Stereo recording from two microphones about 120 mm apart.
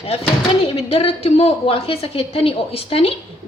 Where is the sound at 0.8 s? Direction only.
50° left (ahead or behind).